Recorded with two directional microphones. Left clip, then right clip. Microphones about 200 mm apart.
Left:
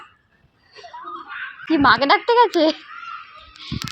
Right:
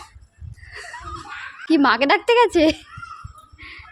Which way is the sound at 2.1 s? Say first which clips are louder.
Left 1 dB; 25° right (ahead or behind).